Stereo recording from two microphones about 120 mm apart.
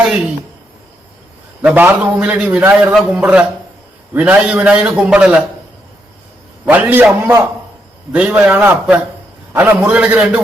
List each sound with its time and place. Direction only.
0.0 s a woman's voice: 10° right (ahead or behind)
1.6 s a man's voice: 15° right (ahead or behind)
6.7 s a man's voice: 15° right (ahead or behind)